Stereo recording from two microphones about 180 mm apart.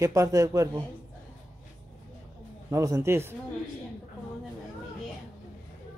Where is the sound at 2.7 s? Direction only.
15° right (ahead or behind).